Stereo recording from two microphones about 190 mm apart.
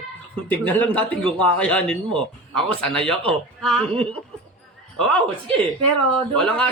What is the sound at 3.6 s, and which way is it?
Speech, 5° left (ahead or behind).